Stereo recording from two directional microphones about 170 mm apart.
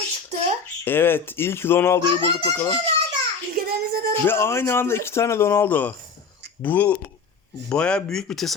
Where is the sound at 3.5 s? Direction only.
65° right (ahead or behind).